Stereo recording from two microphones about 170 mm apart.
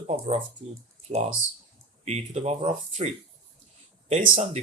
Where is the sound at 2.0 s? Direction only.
40° right (ahead or behind).